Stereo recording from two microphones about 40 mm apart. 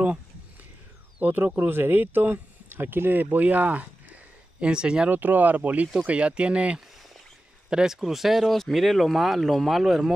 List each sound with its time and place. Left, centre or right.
1.2 s speech: right
1.7 s speech: right
2.7 s speech: right
3.4 s speech: right
4.6 s speech: right
5.1 s speech: right
7.7 s speech: centre